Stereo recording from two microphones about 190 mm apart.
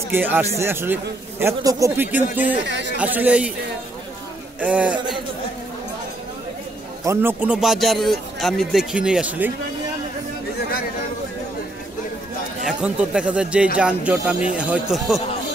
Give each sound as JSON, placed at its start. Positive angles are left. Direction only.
{"t": 0.1, "sound": "a man's voice", "side_deg": -10}
{"t": 2.6, "sound": "speech", "side_deg": -65}
{"t": 3.0, "sound": "a man's voice", "side_deg": -10}
{"t": 4.6, "sound": "a man's voice", "side_deg": -5}
{"t": 7.1, "sound": "speech", "side_deg": -10}
{"t": 12.6, "sound": "speech", "side_deg": -5}